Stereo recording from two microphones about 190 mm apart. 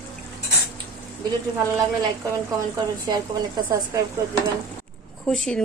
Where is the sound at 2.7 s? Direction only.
20° right (ahead or behind).